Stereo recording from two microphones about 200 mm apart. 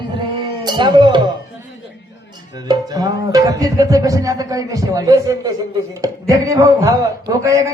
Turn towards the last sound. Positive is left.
turn(degrees=-15)  # may be behind; listen again after turning